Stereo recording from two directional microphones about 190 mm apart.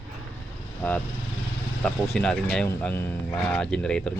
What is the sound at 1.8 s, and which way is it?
Speech, 5° left (ahead or behind).